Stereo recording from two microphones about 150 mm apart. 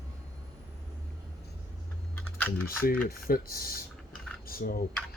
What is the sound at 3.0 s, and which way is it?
Speech, 75° left (ahead or behind).